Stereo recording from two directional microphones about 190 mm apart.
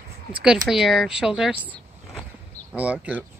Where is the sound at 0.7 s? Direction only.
Centre (ahead or behind).